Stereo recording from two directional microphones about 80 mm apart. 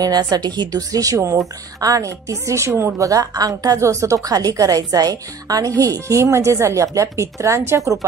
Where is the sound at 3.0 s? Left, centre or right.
Right.